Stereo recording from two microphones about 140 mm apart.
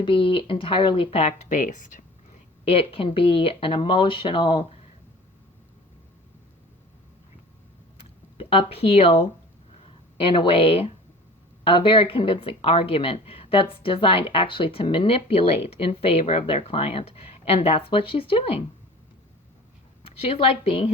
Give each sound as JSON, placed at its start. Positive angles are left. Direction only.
{"t": 0.0, "sound": "speech", "side_deg": 40}
{"t": 2.6, "sound": "speech", "side_deg": 40}
{"t": 8.4, "sound": "speech", "side_deg": 40}
{"t": 20.3, "sound": "speech", "side_deg": 45}